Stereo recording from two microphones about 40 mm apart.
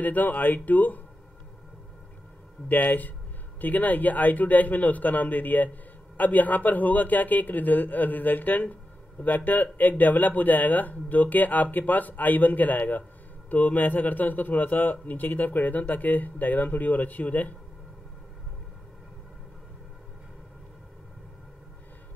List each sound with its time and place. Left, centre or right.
0.0 s a man's voice: left
2.7 s a man's voice: left